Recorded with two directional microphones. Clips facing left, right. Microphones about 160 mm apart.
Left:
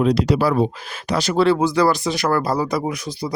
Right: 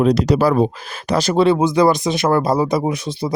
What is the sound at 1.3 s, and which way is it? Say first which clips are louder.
Speech: right 2 dB; 20° right (ahead or behind).